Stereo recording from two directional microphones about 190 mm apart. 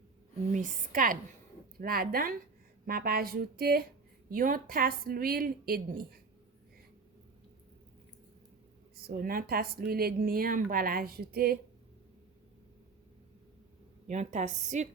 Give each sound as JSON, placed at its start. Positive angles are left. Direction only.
{"t": 0.4, "sound": "speech", "side_deg": -40}
{"t": 9.0, "sound": "speech", "side_deg": -50}
{"t": 14.1, "sound": "a woman's voice", "side_deg": -40}